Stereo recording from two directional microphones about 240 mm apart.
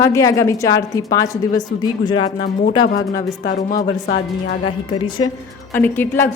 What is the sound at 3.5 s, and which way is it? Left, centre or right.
Speech, left.